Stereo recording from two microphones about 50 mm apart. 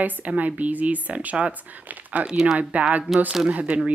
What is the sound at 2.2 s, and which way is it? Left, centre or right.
Speech, centre.